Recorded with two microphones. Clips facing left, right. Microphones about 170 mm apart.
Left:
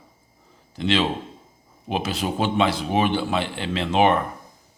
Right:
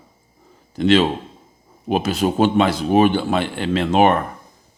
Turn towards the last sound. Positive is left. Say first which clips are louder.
# right 4 dB
turn(degrees=-50)  # may be behind; listen again after turning